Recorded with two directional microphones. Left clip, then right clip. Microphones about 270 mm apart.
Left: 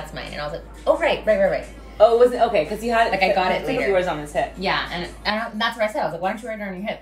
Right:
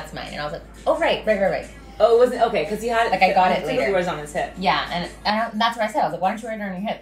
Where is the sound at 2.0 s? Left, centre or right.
Centre.